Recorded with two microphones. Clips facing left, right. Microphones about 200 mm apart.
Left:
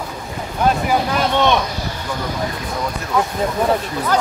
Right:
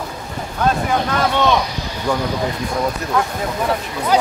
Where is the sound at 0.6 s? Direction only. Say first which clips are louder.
Left 1 dB; 15° left (ahead or behind).